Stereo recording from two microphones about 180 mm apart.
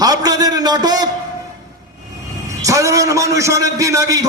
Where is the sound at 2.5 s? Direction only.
15° right (ahead or behind).